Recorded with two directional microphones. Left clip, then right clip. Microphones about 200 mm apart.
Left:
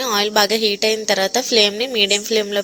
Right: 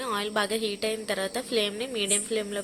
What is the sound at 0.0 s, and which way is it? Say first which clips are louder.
A woman's voice: left 11 dB; 35° left (ahead or behind).